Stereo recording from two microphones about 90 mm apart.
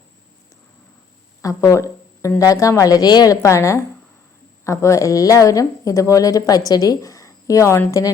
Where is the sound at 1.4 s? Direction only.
35° left (ahead or behind).